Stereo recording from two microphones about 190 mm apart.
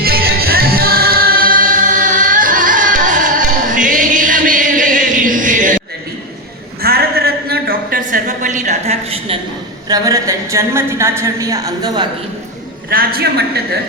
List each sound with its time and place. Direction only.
0.0 s music: 55° right (ahead or behind)
6.8 s a sound: 55° right (ahead or behind); by 9.4 s 35° right (ahead or behind)
9.9 s a woman's voice: 15° right (ahead or behind)
12.9 s a man's voice: 50° right (ahead or behind)